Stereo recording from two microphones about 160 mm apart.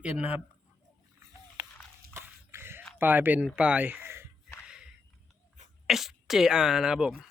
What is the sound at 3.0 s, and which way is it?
Speech, 10° right (ahead or behind).